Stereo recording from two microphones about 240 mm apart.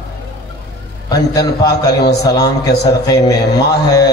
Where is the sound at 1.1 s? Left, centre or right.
Centre.